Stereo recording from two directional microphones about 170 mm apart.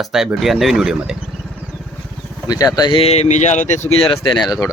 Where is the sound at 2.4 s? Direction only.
20° left (ahead or behind).